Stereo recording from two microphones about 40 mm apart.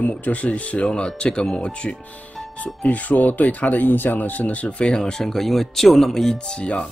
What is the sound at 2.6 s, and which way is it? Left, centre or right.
Speech, left.